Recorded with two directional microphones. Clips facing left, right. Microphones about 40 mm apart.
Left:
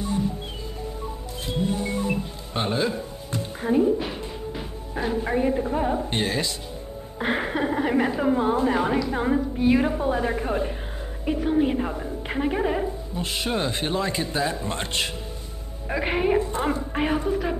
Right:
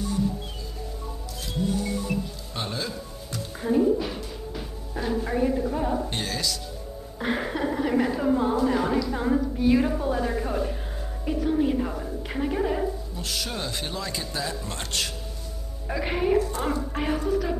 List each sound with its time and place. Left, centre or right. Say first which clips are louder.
1.4 s music: left 1 dB; left
4.9 s a woman's voice: left 2 dB; left